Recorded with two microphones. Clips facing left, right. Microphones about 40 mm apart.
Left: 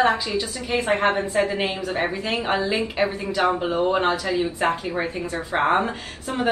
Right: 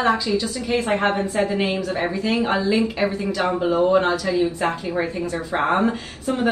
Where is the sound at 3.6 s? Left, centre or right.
Centre.